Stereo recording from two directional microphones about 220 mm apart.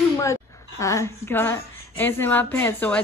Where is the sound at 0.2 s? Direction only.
15° left (ahead or behind).